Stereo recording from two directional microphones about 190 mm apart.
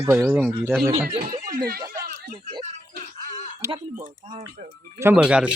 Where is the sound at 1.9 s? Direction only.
50° right (ahead or behind).